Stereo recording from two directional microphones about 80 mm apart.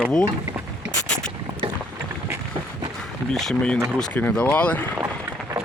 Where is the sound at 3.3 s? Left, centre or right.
Centre.